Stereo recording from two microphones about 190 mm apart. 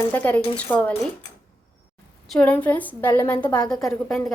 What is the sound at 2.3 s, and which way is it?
Speech, 5° left (ahead or behind).